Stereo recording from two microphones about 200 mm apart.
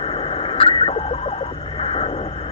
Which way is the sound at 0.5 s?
30° left (ahead or behind).